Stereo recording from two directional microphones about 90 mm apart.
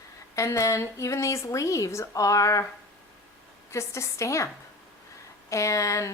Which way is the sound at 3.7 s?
35° left (ahead or behind).